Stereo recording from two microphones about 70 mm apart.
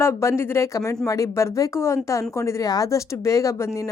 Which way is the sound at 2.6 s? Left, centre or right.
Left.